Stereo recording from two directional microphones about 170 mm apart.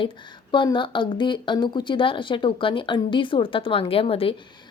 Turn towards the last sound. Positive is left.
turn(degrees=35)  # may be behind; listen again after turning